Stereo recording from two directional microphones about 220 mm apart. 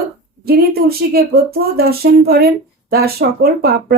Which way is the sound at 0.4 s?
45° right (ahead or behind).